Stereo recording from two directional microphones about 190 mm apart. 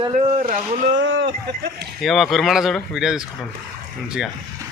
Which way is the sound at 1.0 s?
80° right.